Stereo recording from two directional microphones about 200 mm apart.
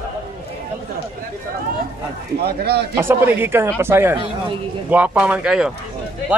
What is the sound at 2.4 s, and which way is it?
Speech, 55° right (ahead or behind).